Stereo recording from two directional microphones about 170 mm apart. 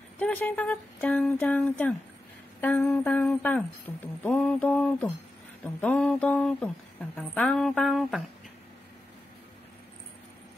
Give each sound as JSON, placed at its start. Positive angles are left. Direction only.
{"t": 0.2, "sound": "speech", "side_deg": 10}